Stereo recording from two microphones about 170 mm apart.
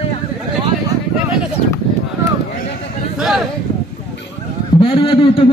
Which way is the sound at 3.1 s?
5° right (ahead or behind).